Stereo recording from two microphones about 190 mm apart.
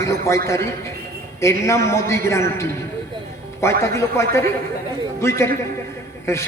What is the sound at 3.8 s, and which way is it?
Speech, 15° left (ahead or behind).